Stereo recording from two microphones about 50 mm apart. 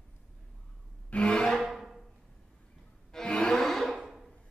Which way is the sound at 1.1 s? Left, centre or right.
Left.